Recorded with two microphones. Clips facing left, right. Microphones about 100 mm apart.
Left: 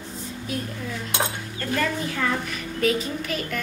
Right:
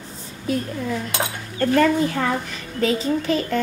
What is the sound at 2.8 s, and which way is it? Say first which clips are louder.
Speech: right 4 dB; 30° right (ahead or behind).